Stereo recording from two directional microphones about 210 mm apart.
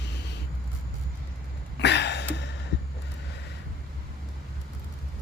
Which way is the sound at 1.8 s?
55° left (ahead or behind).